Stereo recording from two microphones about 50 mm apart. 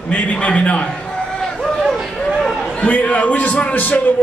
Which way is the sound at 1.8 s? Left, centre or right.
Centre.